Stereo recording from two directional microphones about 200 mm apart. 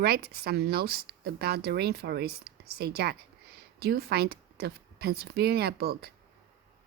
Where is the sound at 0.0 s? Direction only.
50° right (ahead or behind).